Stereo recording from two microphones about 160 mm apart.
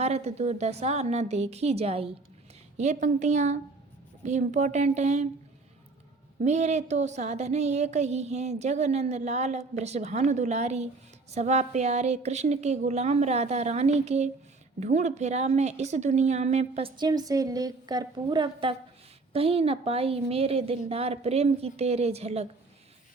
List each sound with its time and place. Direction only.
0.0 s a woman's voice: 40° right (ahead or behind)
6.4 s speech: 45° right (ahead or behind)
17.0 s a woman's voice: 25° right (ahead or behind); by 22.4 s 40° right (ahead or behind)